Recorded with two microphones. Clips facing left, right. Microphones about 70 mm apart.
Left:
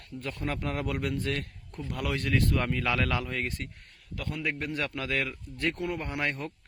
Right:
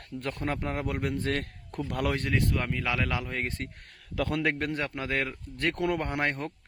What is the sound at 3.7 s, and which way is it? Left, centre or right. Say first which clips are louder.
Speech: right 9 dB; right.